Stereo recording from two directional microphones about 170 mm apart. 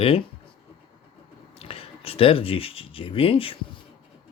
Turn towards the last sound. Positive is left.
turn(degrees=30)  # may be behind; listen again after turning